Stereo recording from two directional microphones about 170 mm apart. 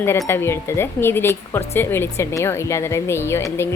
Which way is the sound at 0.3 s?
15° left (ahead or behind).